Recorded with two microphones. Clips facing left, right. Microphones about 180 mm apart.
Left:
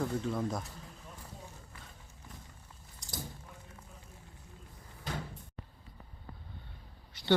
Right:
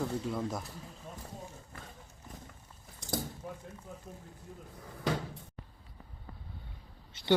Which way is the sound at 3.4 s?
80° right.